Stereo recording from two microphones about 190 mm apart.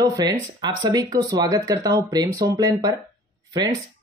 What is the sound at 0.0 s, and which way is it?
Speech, 20° right (ahead or behind).